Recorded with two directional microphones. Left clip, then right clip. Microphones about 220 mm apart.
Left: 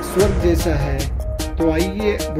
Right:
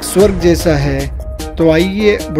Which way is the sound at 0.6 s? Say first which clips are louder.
Right 8 dB; 45° right (ahead or behind).